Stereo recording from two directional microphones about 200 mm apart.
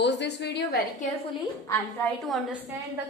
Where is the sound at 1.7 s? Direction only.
5° left (ahead or behind).